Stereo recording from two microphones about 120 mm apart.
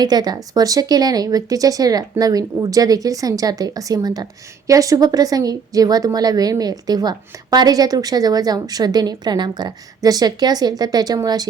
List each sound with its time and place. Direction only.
0.0 s speech: 35° right (ahead or behind)